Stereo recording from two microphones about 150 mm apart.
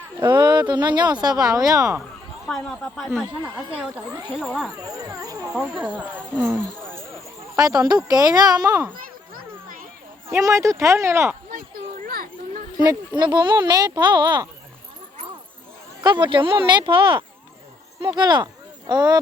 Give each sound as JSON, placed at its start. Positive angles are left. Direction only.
{"t": 0.4, "sound": "speech", "side_deg": -30}
{"t": 2.5, "sound": "speech", "side_deg": 5}
{"t": 5.0, "sound": "speech", "side_deg": -25}
{"t": 5.5, "sound": "speech", "side_deg": -5}
{"t": 7.5, "sound": "speech", "side_deg": -25}
{"t": 10.2, "sound": "speech", "side_deg": -20}
{"t": 11.5, "sound": "children playing", "side_deg": -75}
{"t": 12.8, "sound": "speech", "side_deg": -25}
{"t": 16.0, "sound": "speech", "side_deg": -30}